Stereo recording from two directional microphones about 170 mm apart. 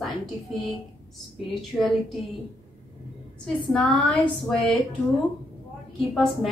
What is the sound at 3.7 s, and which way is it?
Speech, 5° left (ahead or behind).